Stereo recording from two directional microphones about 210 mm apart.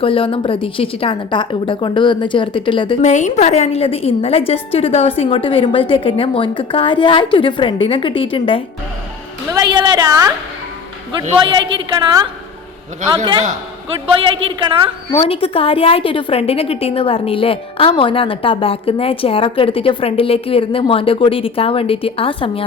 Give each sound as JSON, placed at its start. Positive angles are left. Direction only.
{"t": 0.0, "sound": "a woman's voice", "side_deg": 25}
{"t": 9.7, "sound": "a woman's voice", "side_deg": -20}
{"t": 15.1, "sound": "a woman's voice", "side_deg": 25}